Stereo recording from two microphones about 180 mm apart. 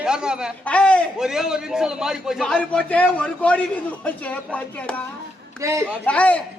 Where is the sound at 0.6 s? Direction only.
5° left (ahead or behind).